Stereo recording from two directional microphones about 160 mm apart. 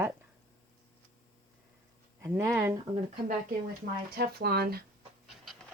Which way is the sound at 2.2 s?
15° right (ahead or behind).